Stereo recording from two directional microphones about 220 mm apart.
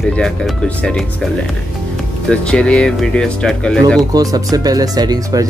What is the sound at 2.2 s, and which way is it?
Speech, 5° left (ahead or behind).